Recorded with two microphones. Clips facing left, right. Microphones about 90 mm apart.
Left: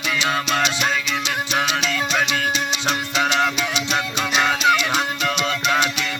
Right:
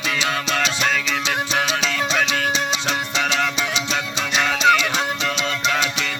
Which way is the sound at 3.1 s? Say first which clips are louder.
Left 3 dB; 40° left (ahead or behind).